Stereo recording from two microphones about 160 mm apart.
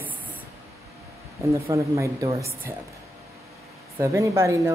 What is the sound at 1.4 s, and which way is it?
Speech, 20° right (ahead or behind).